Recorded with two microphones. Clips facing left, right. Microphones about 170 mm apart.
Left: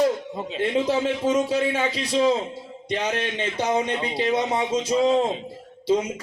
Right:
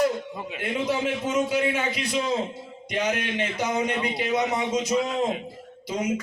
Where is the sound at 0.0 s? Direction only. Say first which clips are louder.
Left 2 dB; 30° left (ahead or behind).